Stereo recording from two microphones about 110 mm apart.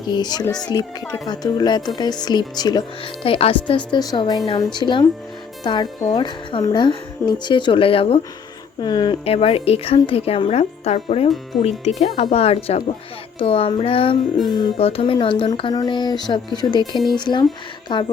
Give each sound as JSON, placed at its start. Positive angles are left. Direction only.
{"t": 0.1, "sound": "speech", "side_deg": 40}
{"t": 3.0, "sound": "speech", "side_deg": 55}
{"t": 8.8, "sound": "speech", "side_deg": 40}
{"t": 9.2, "sound": "speech", "side_deg": 60}
{"t": 13.4, "sound": "speech", "side_deg": 55}
{"t": 15.7, "sound": "speech", "side_deg": 40}